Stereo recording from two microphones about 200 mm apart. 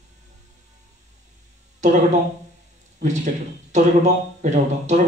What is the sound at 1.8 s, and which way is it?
Speech, 35° right (ahead or behind).